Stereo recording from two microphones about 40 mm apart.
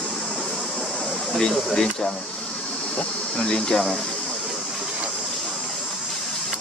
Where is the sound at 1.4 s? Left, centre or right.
Centre.